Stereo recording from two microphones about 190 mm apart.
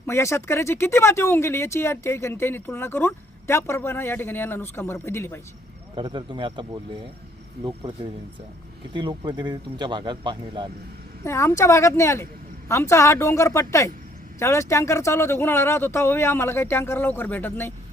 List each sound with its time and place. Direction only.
0.0 s speech: 15° left (ahead or behind)
6.0 s speech: 25° right (ahead or behind)
8.9 s speech: 25° right (ahead or behind)
11.2 s speech: 15° left (ahead or behind)